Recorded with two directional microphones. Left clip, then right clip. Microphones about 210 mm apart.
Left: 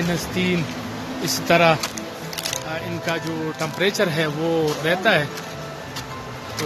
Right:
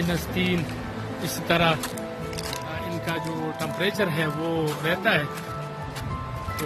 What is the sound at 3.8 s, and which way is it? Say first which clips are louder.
Speech: left 5 dB; 10° left (ahead or behind).